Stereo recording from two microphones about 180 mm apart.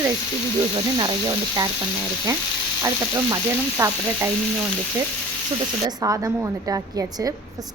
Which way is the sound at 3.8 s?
15° right (ahead or behind).